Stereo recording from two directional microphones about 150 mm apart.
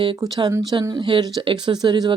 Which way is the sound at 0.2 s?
25° right (ahead or behind).